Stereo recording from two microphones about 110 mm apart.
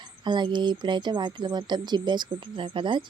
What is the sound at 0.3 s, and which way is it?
Speech, 45° right (ahead or behind).